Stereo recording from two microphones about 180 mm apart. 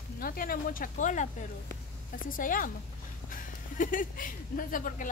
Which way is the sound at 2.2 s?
50° left (ahead or behind).